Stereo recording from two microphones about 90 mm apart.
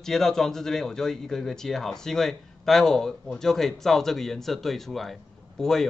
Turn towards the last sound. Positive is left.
turn(degrees=5)  # may be behind; listen again after turning